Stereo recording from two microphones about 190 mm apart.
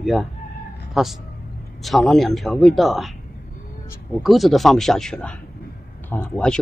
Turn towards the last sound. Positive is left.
turn(degrees=5)  # may be behind; listen again after turning